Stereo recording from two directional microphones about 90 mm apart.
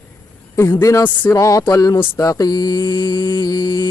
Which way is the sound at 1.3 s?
40° left (ahead or behind).